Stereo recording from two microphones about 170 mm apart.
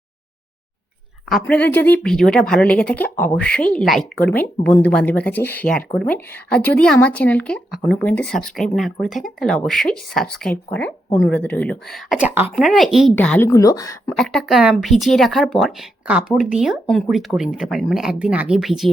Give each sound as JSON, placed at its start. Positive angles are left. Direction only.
{"t": 1.3, "sound": "speech", "side_deg": 10}
{"t": 13.5, "sound": "speech", "side_deg": 20}
{"t": 14.2, "sound": "speech", "side_deg": 5}